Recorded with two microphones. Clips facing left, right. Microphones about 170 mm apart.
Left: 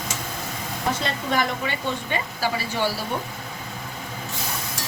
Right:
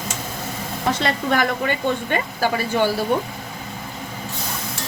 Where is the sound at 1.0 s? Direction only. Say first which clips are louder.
Right 6 dB; 55° right (ahead or behind).